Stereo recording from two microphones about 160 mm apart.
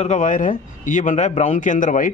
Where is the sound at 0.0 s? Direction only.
50° left (ahead or behind).